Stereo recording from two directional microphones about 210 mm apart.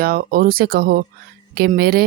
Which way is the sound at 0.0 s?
45° right (ahead or behind).